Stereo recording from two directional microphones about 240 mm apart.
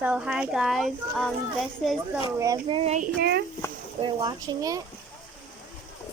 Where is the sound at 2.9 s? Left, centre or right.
Right.